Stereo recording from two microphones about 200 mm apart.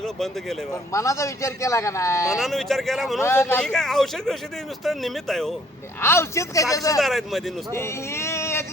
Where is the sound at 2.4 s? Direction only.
Centre (ahead or behind).